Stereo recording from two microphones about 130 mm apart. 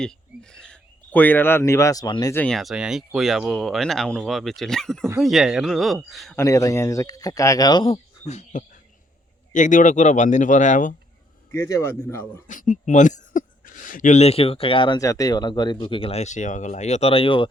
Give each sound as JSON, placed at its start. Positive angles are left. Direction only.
{"t": 0.5, "sound": "speech", "side_deg": 5}
{"t": 2.3, "sound": "speech", "side_deg": 10}
{"t": 2.6, "sound": "speech", "side_deg": -5}
{"t": 6.3, "sound": "speech", "side_deg": 25}
{"t": 7.9, "sound": "speech", "side_deg": 60}
{"t": 9.5, "sound": "speech", "side_deg": 75}
{"t": 11.5, "sound": "speech", "side_deg": 20}
{"t": 12.5, "sound": "speech", "side_deg": 80}
{"t": 14.9, "sound": "speech", "side_deg": 25}